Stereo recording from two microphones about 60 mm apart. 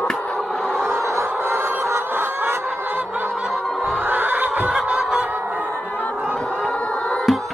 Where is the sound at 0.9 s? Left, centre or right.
Right.